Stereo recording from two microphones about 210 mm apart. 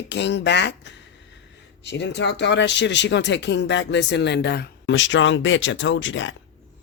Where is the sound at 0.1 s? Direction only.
55° left (ahead or behind).